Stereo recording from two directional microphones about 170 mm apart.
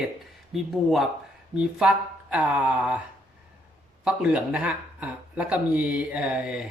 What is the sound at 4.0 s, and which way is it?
Speech, 5° right (ahead or behind).